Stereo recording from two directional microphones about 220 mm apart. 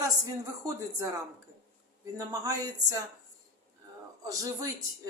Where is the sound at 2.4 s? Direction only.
15° right (ahead or behind).